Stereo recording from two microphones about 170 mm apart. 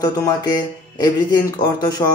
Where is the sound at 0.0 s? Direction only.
25° left (ahead or behind).